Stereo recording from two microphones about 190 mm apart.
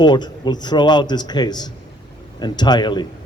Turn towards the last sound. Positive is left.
turn(degrees=25)  # may be behind; listen again after turning